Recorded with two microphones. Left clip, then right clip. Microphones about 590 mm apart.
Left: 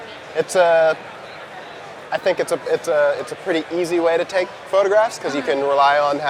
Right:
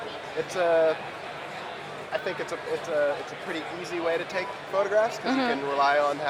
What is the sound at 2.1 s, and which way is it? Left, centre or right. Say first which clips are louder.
Speech: left 12 dB; left.